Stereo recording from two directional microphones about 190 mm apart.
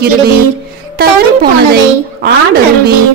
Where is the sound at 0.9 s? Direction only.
55° right (ahead or behind).